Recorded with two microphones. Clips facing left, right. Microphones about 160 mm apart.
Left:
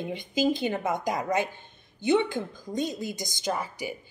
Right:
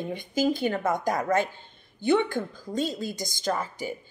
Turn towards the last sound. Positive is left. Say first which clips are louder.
# right 2 dB
turn(degrees=10)  # may be behind; listen again after turning